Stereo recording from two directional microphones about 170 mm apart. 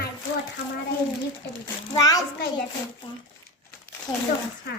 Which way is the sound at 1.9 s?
20° left (ahead or behind).